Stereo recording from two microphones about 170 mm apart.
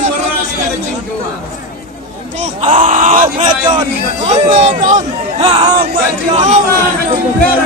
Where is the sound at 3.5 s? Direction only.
25° right (ahead or behind).